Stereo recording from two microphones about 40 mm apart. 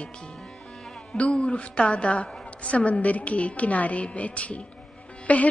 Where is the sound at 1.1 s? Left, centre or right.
Left.